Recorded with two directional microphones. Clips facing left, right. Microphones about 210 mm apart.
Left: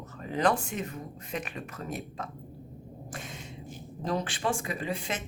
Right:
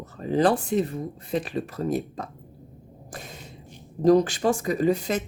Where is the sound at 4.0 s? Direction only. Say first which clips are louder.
Right 12 dB; 40° right (ahead or behind).